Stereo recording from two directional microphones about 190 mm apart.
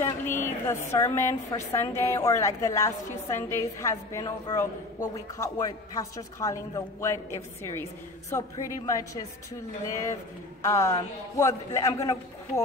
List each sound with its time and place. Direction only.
0.0 s a woman's voice: 15° left (ahead or behind)
8.3 s a woman's voice: 15° left (ahead or behind)